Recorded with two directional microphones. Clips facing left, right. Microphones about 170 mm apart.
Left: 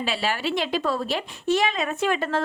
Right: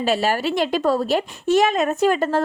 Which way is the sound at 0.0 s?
45° right (ahead or behind).